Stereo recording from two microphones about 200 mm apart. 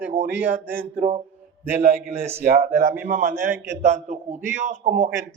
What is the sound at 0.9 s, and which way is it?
A man's voice, 35° right (ahead or behind).